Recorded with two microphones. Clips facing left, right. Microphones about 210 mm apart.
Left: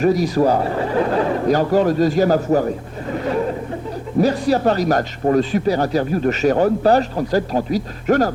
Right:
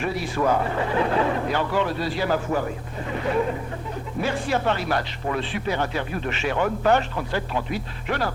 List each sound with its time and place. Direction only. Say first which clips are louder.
0.0 s speech: left 9 dB; 40° left (ahead or behind)
4.2 s speech: left 9 dB; 40° left (ahead or behind)